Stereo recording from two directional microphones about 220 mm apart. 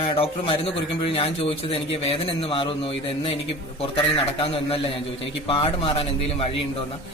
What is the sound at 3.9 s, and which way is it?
A man's voice, 25° left (ahead or behind).